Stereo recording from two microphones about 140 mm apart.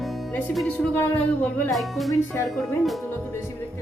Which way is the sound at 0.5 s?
Centre (ahead or behind).